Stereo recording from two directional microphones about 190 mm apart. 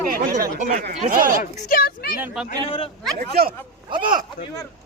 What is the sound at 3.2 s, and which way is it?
Speech, 55° right (ahead or behind).